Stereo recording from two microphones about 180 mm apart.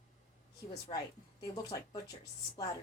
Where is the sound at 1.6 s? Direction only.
20° left (ahead or behind).